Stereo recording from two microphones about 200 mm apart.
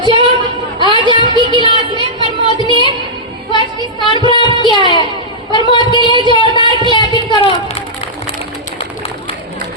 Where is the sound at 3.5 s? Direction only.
20° left (ahead or behind).